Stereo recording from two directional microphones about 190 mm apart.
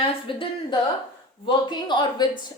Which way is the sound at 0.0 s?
25° left (ahead or behind).